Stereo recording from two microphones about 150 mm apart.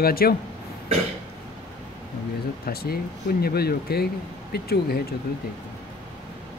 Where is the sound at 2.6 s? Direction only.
90° left.